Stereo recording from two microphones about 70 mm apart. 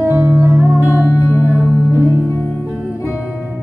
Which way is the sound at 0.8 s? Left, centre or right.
Left.